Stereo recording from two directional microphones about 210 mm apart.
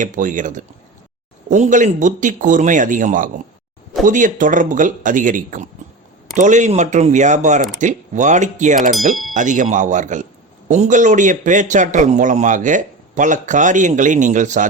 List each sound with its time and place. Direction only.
0.0 s a man's voice: 40° right (ahead or behind)